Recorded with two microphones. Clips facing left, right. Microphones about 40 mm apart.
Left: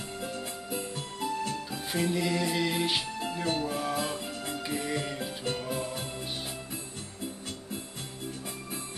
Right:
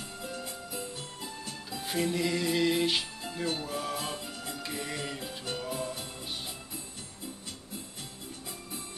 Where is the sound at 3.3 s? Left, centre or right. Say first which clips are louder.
Left 2 dB; left.